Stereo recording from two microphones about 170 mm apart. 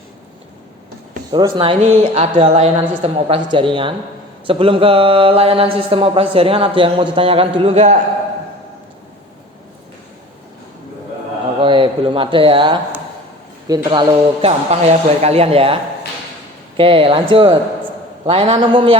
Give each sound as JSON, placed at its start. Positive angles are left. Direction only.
{"t": 1.3, "sound": "speech", "side_deg": -25}
{"t": 11.6, "sound": "speech", "side_deg": -30}
{"t": 14.4, "sound": "speech", "side_deg": -40}